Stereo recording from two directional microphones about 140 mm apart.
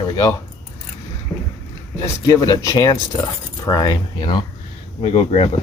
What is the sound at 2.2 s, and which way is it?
Speech, 25° left (ahead or behind).